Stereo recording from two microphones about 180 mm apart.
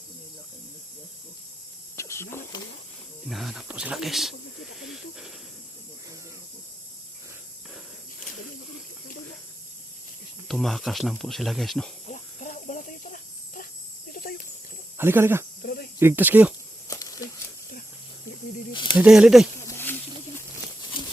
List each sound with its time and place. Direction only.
2.0 s snake: 15° left (ahead or behind)
3.2 s snake: centre (ahead or behind)
10.5 s speech: centre (ahead or behind)
12.0 s cricket: 45° left (ahead or behind)
14.1 s a sound: 50° left (ahead or behind)
14.9 s speech: 10° right (ahead or behind)
15.6 s cricket: 60° left (ahead or behind)
16.0 s speech: 10° right (ahead or behind)
16.9 s a sound: 20° left (ahead or behind)
18.7 s snake: 25° left (ahead or behind)
18.9 s speech: 5° right (ahead or behind)
19.6 s snake: 10° left (ahead or behind)